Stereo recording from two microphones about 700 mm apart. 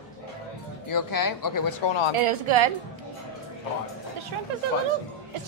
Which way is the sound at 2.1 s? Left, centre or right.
Right.